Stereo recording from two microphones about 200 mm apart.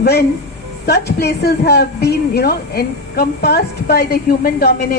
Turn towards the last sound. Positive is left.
turn(degrees=50)  # may be behind; listen again after turning